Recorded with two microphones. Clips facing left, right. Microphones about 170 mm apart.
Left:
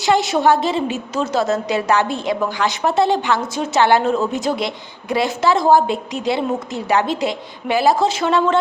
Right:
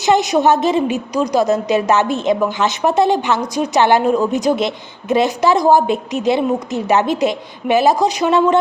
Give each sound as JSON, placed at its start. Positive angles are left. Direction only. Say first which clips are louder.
{"t": 0.0, "sound": "a woman's voice", "louder": "right 2 dB", "side_deg": -20}